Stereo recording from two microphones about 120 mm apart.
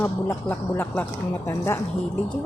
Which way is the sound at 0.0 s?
15° left (ahead or behind).